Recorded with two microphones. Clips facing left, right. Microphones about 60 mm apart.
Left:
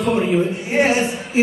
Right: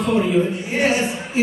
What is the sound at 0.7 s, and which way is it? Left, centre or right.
Speech, left.